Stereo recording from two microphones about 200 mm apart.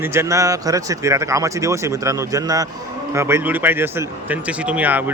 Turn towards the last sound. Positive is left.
turn(degrees=-10)  # may be behind; listen again after turning